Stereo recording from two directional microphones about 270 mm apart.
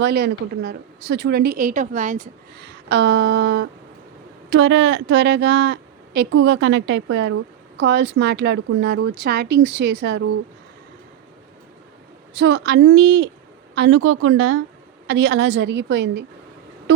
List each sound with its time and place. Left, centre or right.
0.0 s a woman's voice: right
12.4 s a woman's voice: right